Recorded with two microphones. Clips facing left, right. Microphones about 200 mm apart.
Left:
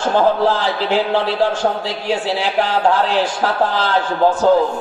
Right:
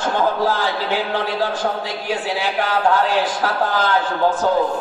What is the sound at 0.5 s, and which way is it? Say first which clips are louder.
A man's voice: left 3 dB; 30° left (ahead or behind).